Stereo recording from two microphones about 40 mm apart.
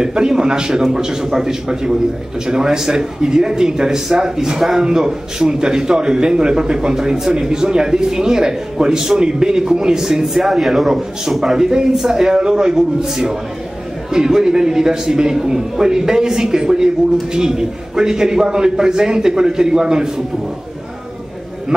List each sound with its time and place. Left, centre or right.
0.0 s a man's voice: centre